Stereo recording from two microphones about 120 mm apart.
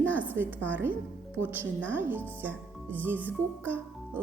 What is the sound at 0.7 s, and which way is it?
Speech, 15° right (ahead or behind).